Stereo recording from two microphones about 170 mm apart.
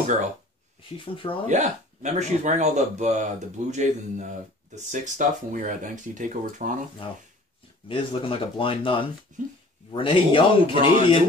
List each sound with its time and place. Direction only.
0.9 s speech: 30° left (ahead or behind)
1.5 s speech: 40° right (ahead or behind)
7.0 s speech: 30° left (ahead or behind)
9.3 s speech: 50° right (ahead or behind)
9.9 s speech: 30° left (ahead or behind)